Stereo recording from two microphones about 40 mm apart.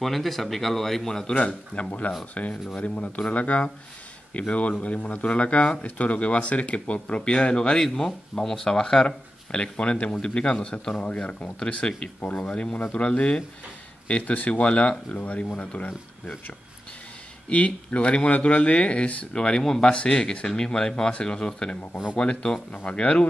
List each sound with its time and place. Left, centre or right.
0.0 s speech: centre
1.3 s speech: left
9.0 s speech: left
17.5 s speech: left
19.6 s speech: centre
19.9 s speech: left